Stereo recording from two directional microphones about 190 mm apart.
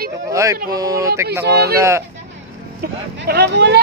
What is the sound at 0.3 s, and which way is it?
Speech, 15° right (ahead or behind).